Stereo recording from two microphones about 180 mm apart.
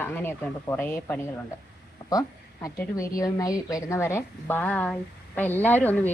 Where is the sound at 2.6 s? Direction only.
15° left (ahead or behind).